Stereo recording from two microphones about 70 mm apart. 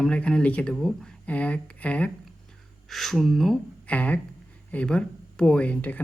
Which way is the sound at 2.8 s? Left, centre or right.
Centre.